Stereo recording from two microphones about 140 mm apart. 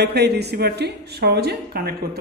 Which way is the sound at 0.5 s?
90° right.